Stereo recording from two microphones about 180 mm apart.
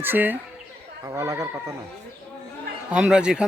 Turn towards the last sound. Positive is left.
turn(degrees=-5)  # may be behind; listen again after turning